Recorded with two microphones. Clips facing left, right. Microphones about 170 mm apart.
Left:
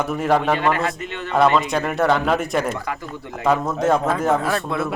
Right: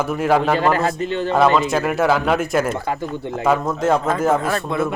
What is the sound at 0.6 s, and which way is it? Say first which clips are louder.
Speech: right 2 dB; 35° right (ahead or behind).